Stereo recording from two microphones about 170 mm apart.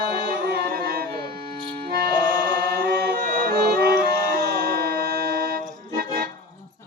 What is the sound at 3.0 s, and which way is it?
Music, 60° right (ahead or behind).